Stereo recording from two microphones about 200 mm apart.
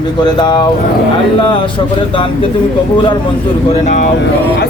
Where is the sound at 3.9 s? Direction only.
35° left (ahead or behind).